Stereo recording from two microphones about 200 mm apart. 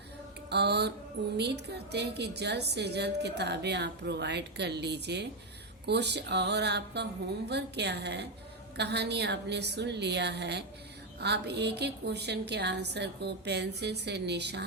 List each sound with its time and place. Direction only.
0.5 s a woman's voice: 55° right (ahead or behind)